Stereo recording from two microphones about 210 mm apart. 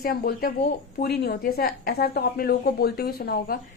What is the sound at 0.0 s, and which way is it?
A woman's voice, 45° left (ahead or behind).